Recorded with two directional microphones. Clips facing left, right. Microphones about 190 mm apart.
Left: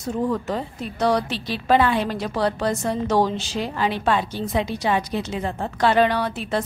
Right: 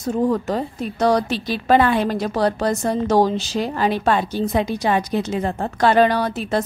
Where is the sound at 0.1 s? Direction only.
45° right (ahead or behind).